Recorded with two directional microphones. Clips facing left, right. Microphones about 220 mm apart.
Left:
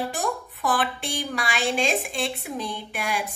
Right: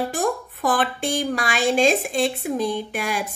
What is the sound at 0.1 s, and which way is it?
A woman's voice, 50° right (ahead or behind).